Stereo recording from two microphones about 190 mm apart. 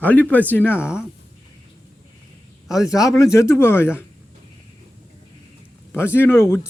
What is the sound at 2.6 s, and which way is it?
Speech, centre (ahead or behind).